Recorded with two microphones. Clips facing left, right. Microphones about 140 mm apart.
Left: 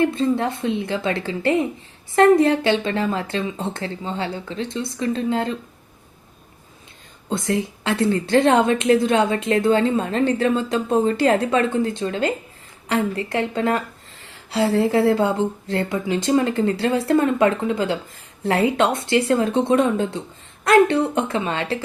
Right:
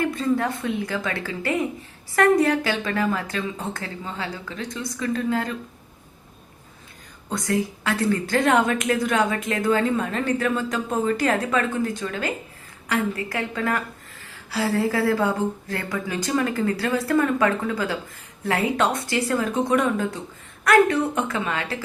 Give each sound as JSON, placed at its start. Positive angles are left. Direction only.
{"t": 0.0, "sound": "a woman's voice", "side_deg": 25}
{"t": 7.3, "sound": "a woman's voice", "side_deg": 25}